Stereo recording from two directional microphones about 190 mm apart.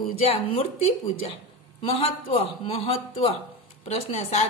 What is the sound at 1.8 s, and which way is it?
A man's voice, 30° left (ahead or behind).